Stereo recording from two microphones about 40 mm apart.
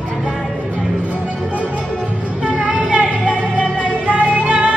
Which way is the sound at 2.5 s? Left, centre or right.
Right.